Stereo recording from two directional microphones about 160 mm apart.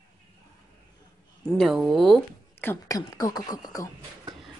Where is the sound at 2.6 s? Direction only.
15° left (ahead or behind).